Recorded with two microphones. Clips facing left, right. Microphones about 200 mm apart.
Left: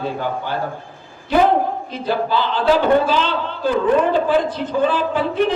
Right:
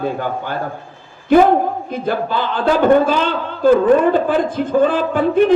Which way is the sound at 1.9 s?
50° right (ahead or behind).